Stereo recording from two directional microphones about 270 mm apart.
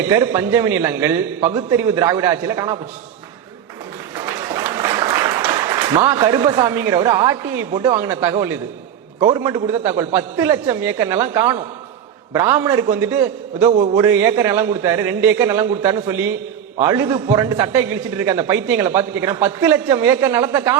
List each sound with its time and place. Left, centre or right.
0.1 s a man's voice: centre
4.4 s applause: centre
5.4 s a man's voice: centre